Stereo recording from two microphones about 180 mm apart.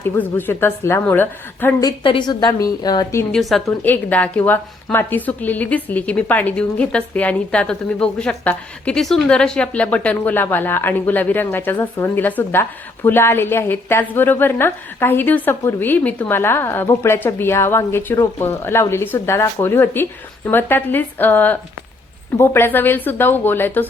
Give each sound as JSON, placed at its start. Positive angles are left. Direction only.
{"t": 0.0, "sound": "a woman's voice", "side_deg": 10}
{"t": 2.0, "sound": "a woman's voice", "side_deg": 25}
{"t": 3.3, "sound": "a woman's voice", "side_deg": 5}